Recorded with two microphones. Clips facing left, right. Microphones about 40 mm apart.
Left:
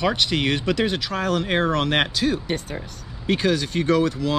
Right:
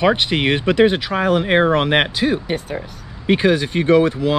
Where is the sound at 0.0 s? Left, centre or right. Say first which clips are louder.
Right 5 dB; right.